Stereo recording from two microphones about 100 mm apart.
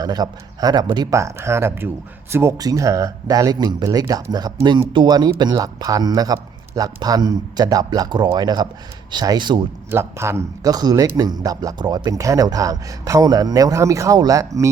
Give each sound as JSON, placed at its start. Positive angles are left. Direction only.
{"t": 0.0, "sound": "speech", "side_deg": -40}
{"t": 1.1, "sound": "speech", "side_deg": -30}
{"t": 9.9, "sound": "speech", "side_deg": -25}
{"t": 10.7, "sound": "speech", "side_deg": -40}